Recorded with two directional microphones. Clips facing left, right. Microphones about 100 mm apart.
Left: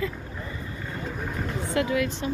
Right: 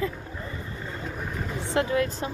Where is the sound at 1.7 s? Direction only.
30° right (ahead or behind).